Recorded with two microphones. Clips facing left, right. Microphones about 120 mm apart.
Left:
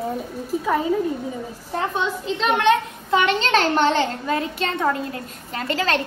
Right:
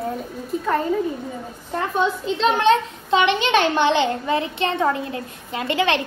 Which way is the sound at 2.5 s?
30° right (ahead or behind).